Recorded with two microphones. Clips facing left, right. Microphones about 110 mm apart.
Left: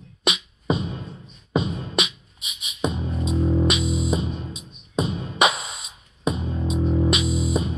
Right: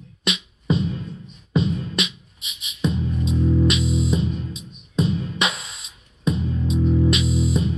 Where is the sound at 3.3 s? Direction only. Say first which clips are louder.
Right 1 dB; 35° left (ahead or behind).